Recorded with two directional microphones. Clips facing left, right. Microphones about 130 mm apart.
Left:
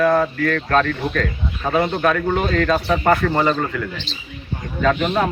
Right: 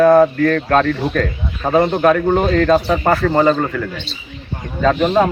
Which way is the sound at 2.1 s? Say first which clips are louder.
Right 5 dB; 15° right (ahead or behind).